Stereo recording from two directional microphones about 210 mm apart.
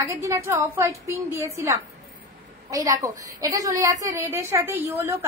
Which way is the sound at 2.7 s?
15° right (ahead or behind).